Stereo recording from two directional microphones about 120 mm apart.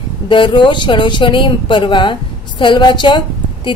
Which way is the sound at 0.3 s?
40° left (ahead or behind).